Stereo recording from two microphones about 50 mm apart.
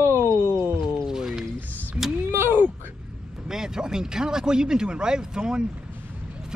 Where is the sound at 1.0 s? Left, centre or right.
Centre.